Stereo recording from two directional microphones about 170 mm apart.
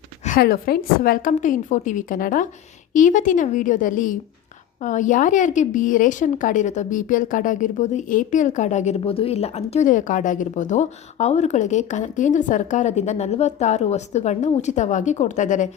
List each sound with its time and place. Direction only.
0.3 s a woman's voice: 60° left (ahead or behind); by 15.7 s 45° left (ahead or behind)